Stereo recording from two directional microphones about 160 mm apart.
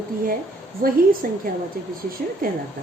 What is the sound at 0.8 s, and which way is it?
Speech, 65° right (ahead or behind).